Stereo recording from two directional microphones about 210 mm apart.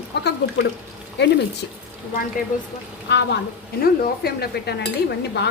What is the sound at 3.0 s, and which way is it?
A woman's voice, 55° left (ahead or behind).